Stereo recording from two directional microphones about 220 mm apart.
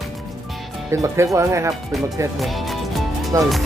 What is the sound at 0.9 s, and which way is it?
Speech, 15° right (ahead or behind).